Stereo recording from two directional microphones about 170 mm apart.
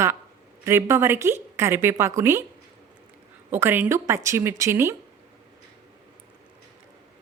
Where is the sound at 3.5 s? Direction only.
10° right (ahead or behind).